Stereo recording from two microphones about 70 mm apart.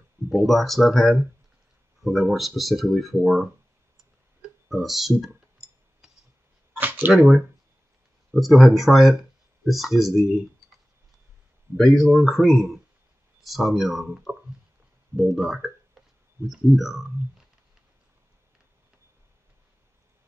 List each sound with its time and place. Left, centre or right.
0.3 s speech: centre
4.4 s clicking: centre
5.6 s a sound: centre
6.7 s a sound: right
7.1 s speech: centre
11.8 s speech: centre